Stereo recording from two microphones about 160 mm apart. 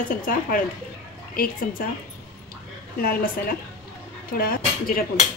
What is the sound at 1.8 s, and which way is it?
Speech, 65° left (ahead or behind).